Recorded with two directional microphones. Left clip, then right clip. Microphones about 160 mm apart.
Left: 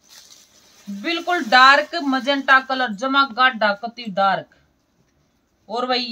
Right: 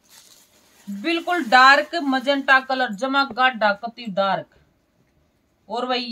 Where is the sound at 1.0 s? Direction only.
5° right (ahead or behind).